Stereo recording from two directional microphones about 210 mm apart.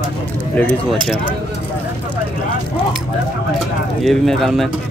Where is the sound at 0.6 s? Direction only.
5° left (ahead or behind).